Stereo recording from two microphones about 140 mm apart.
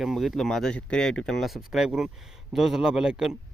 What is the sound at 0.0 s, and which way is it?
Speech, centre (ahead or behind).